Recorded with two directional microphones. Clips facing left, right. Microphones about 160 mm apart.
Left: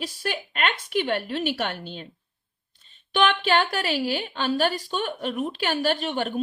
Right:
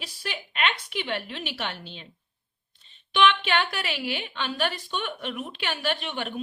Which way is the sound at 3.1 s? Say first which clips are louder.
Left 1 dB; 40° left (ahead or behind).